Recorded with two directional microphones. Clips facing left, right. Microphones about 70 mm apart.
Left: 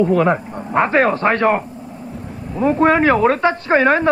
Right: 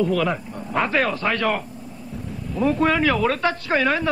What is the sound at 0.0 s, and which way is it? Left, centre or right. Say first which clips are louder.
Speech: left 6 dB; left.